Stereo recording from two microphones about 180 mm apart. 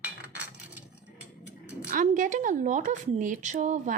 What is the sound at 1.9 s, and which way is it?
A woman's voice, 45° right (ahead or behind).